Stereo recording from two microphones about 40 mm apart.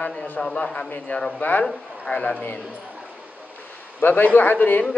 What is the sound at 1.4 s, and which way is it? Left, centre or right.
Speech, left.